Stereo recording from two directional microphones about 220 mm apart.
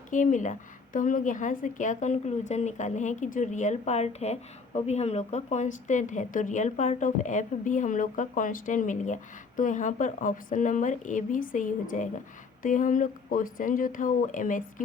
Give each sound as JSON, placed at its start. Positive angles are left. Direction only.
{"t": 0.1, "sound": "a woman's voice", "side_deg": 35}